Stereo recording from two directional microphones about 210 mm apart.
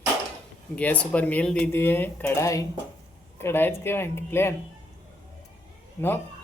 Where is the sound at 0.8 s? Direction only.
5° left (ahead or behind).